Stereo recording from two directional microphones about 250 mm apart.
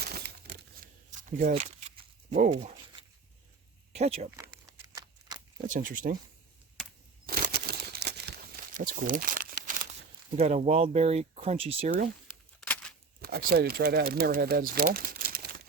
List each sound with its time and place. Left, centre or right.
0.2 s crumpling: right
1.4 s speech: right
3.9 s speech: right
4.4 s a sound: centre
5.6 s speech: right
7.3 s crumpling: right
10.3 s speech: right
12.5 s a sound: centre
13.2 s speech: right
14.9 s crumpling: right